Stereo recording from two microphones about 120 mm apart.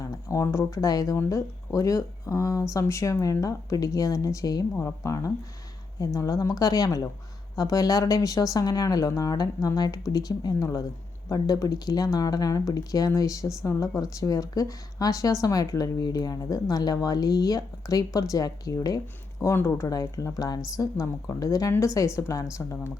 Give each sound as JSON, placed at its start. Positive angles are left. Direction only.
{"t": 0.0, "sound": "a woman's voice", "side_deg": 25}